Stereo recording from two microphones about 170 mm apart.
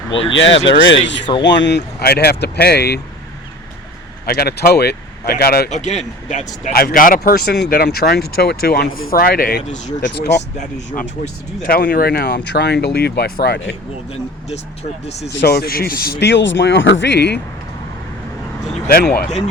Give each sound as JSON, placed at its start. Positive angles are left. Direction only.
{"t": 0.3, "sound": "speech", "side_deg": 90}
{"t": 1.3, "sound": "speech", "side_deg": 25}
{"t": 1.5, "sound": "speech", "side_deg": 90}
{"t": 4.4, "sound": "speech", "side_deg": 65}
{"t": 5.7, "sound": "a man's voice", "side_deg": 40}
{"t": 10.0, "sound": "speech", "side_deg": 85}
{"t": 11.6, "sound": "speech", "side_deg": 55}
{"t": 15.2, "sound": "speech", "side_deg": 85}
{"t": 18.9, "sound": "speech", "side_deg": 65}